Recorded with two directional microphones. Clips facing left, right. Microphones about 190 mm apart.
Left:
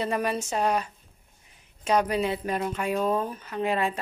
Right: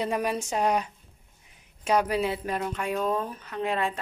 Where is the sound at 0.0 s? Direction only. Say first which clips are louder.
Even; 10° right (ahead or behind).